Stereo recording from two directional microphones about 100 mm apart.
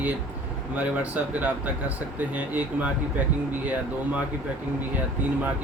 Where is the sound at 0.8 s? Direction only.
15° right (ahead or behind).